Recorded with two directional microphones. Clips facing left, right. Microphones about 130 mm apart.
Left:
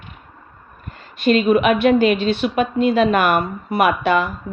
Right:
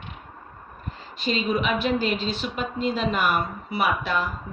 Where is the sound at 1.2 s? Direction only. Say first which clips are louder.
Left 10 dB; 60° left (ahead or behind).